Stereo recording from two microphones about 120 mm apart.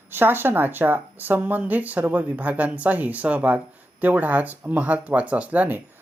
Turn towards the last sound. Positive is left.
turn(degrees=-15)  # may be behind; listen again after turning